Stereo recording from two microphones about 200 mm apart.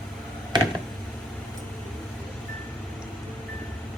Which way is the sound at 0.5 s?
20° right (ahead or behind).